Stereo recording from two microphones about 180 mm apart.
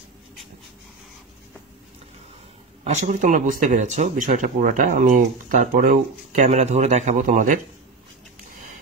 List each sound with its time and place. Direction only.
2.8 s speech: 40° right (ahead or behind)